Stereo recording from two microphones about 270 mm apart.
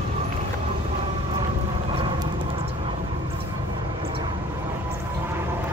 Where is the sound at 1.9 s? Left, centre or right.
Centre.